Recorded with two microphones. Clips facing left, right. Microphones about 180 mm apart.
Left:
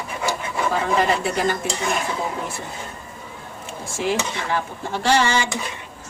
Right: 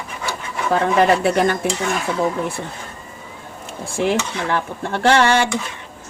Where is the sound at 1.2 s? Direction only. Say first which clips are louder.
Right 5 dB; 60° right (ahead or behind).